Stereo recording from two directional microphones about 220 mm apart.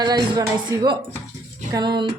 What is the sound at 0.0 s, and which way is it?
Speech, 20° right (ahead or behind).